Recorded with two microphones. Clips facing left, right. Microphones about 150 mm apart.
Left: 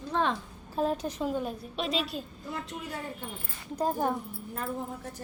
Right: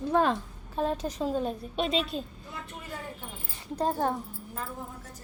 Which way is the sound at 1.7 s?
Centre (ahead or behind).